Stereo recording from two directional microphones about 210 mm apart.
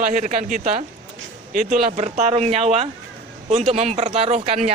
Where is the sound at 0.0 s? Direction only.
35° right (ahead or behind).